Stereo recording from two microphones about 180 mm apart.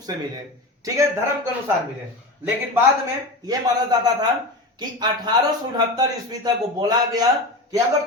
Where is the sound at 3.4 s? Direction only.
20° right (ahead or behind).